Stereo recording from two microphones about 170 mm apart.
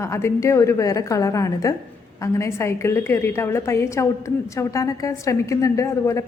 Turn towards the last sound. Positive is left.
turn(degrees=15)  # may be behind; listen again after turning